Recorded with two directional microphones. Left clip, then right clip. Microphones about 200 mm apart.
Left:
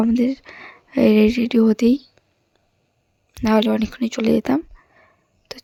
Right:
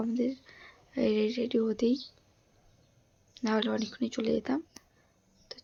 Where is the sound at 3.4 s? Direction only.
45° left (ahead or behind).